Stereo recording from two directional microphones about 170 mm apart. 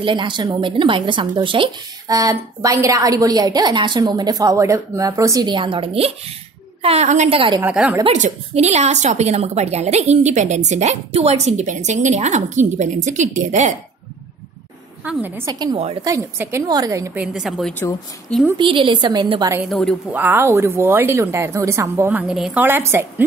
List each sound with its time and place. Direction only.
0.0 s a woman's voice: 30° right (ahead or behind)
7.6 s speech: 10° right (ahead or behind)
8.1 s a woman's voice: 40° right (ahead or behind)
15.0 s speech: 10° right (ahead or behind)
15.6 s a woman's voice: 35° right (ahead or behind)
16.0 s speech: 15° right (ahead or behind)
17.1 s a woman's voice: 5° right (ahead or behind)
18.6 s speech: 30° right (ahead or behind)
19.7 s a woman's voice: 5° left (ahead or behind)
20.1 s speech: 10° right (ahead or behind)
22.3 s speech: 5° right (ahead or behind)